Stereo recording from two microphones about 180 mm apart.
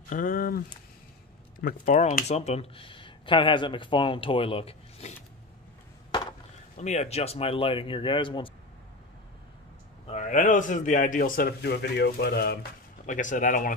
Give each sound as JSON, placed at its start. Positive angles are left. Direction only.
{"t": 0.1, "sound": "a man's voice", "side_deg": 50}
{"t": 2.0, "sound": "speech", "side_deg": 40}
{"t": 6.8, "sound": "speech", "side_deg": 40}
{"t": 10.0, "sound": "a man's voice", "side_deg": 45}
{"t": 13.0, "sound": "a man's voice", "side_deg": 45}